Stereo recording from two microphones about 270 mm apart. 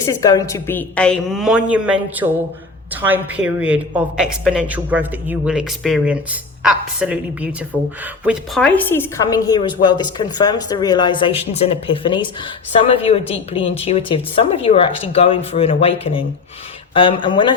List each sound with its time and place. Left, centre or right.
0.2 s a woman's voice: centre